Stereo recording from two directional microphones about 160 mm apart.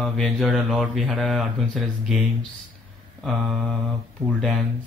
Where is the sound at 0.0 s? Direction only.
Centre (ahead or behind).